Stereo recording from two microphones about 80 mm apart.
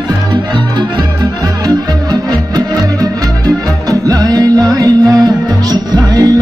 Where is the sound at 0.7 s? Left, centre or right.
Right.